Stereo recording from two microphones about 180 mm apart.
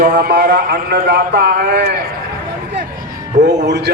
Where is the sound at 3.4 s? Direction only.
70° right (ahead or behind).